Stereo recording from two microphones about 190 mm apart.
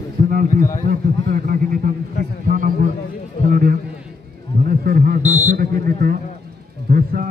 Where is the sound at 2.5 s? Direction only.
45° right (ahead or behind).